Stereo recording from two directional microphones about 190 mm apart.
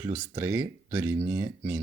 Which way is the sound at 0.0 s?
10° right (ahead or behind).